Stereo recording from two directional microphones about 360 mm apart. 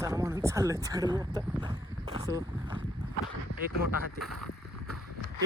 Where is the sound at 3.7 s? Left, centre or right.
Right.